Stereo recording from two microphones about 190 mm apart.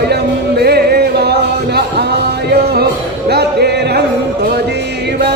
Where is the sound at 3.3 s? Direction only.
60° right (ahead or behind).